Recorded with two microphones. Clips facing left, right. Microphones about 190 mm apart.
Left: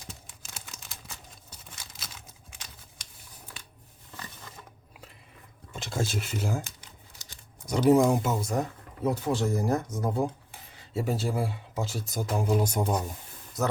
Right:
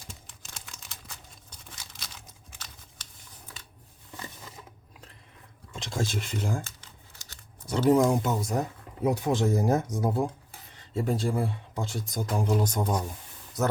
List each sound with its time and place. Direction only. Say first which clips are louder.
0.1 s a sound: left 1 dB; 5° left (ahead or behind)
2.0 s computer keyboard: left 1 dB; 10° left (ahead or behind)
4.2 s crushing: right 2 dB; 10° right (ahead or behind)
5.7 s speech: even; 5° left (ahead or behind)
9.0 s speech: right 2 dB; 15° right (ahead or behind)
10.8 s speech: right 1 dB; 10° left (ahead or behind)